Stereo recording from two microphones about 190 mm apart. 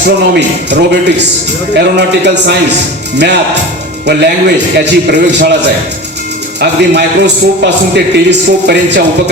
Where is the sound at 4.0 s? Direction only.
60° right (ahead or behind).